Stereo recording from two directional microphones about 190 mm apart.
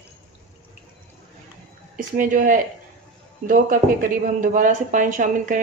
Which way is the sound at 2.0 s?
45° right (ahead or behind).